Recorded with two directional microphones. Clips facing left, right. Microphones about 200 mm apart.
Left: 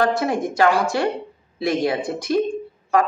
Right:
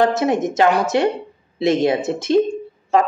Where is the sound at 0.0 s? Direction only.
20° right (ahead or behind).